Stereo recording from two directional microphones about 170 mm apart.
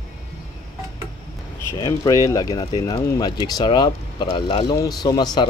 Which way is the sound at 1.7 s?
20° left (ahead or behind).